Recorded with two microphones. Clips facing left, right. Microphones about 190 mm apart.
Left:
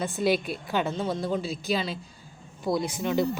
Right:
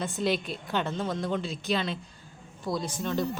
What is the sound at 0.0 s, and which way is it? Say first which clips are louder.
Speech: left 3 dB; 5° left (ahead or behind).